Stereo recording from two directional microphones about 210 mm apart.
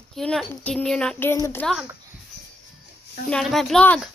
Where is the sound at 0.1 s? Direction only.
Centre (ahead or behind).